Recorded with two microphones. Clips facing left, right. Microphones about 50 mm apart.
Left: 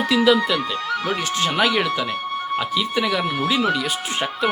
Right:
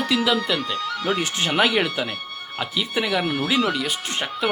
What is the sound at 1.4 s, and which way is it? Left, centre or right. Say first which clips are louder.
Speech: even; centre.